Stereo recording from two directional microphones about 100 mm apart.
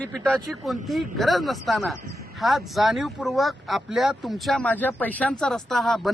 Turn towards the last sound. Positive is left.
turn(degrees=0)  # may be behind; listen again after turning